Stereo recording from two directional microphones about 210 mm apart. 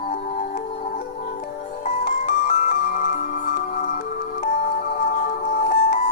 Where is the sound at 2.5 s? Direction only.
40° left (ahead or behind).